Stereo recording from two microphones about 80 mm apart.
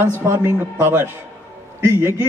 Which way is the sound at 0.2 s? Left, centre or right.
Right.